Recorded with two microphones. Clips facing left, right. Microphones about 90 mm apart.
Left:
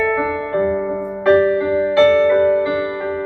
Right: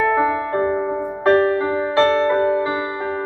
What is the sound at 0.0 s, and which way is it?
Music, 30° right (ahead or behind).